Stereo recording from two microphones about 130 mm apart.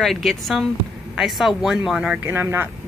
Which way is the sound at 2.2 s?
15° right (ahead or behind).